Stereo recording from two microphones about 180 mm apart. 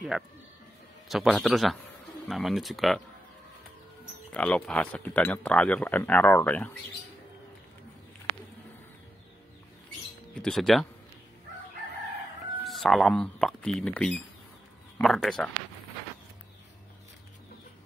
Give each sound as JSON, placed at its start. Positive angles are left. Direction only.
{"t": 0.1, "sound": "speech", "side_deg": 0}
{"t": 4.3, "sound": "speech", "side_deg": 5}
{"t": 10.4, "sound": "speech", "side_deg": 0}
{"t": 12.6, "sound": "speech", "side_deg": 0}